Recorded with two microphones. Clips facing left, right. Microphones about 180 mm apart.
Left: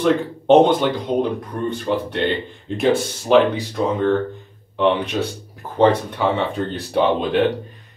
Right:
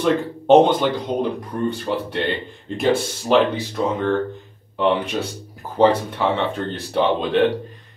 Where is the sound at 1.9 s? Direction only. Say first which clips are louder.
Left 2 dB; 5° right (ahead or behind).